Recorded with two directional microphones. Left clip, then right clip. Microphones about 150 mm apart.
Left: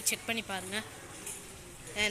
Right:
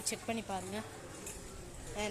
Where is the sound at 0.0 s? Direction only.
10° right (ahead or behind).